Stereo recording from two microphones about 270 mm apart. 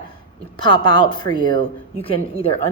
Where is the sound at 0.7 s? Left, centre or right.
Centre.